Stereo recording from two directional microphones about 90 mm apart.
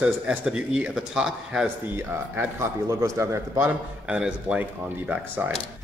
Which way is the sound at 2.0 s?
30° right (ahead or behind).